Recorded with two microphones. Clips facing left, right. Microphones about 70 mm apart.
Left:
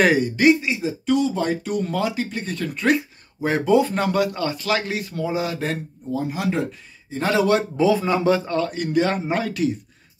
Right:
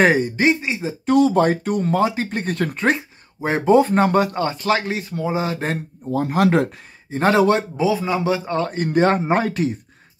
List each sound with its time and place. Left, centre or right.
0.0 s speech: right
1.0 s speech: right
2.2 s speech: right
2.8 s speech: right
6.1 s speech: right
7.1 s speech: right
7.7 s speech: centre
8.5 s speech: right